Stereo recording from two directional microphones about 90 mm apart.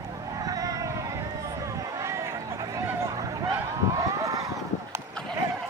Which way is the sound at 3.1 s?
40° right (ahead or behind).